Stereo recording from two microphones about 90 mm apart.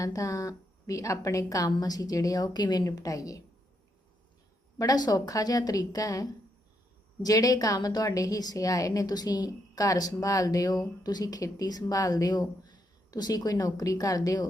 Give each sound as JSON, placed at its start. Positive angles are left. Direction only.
{"t": 0.0, "sound": "a woman's voice", "side_deg": 40}
{"t": 4.8, "sound": "a woman's voice", "side_deg": 45}